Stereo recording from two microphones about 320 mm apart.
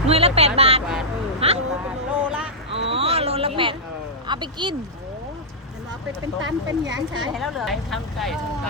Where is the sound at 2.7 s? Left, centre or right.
Centre.